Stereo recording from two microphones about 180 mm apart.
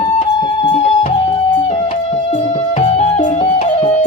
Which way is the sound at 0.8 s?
35° left (ahead or behind).